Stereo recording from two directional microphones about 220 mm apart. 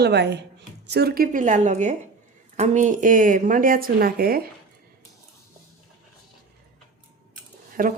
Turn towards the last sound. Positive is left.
turn(degrees=-40)  # may be behind; listen again after turning